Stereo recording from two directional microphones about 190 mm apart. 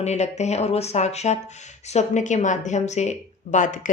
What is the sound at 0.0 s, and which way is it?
Speech, 35° left (ahead or behind).